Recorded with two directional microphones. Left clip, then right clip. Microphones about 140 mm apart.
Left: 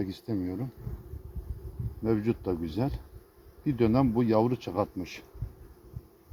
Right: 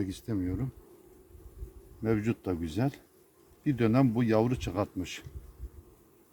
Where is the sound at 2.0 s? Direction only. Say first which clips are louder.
Left 2 dB; 60° right (ahead or behind).